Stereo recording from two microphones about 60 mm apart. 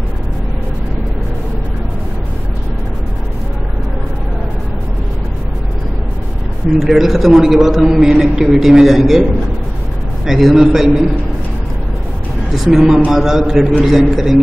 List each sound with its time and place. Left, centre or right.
6.8 s a man's voice: centre
10.2 s a man's voice: centre
12.5 s a man's voice: centre